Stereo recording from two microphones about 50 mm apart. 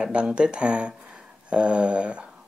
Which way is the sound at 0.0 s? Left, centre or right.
Centre.